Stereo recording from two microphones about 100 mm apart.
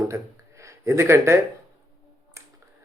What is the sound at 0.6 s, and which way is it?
Speech, 30° right (ahead or behind).